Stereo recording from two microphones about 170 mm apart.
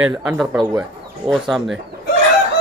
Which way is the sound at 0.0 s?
10° right (ahead or behind).